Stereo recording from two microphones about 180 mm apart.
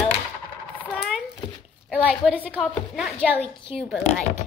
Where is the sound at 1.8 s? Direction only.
5° left (ahead or behind).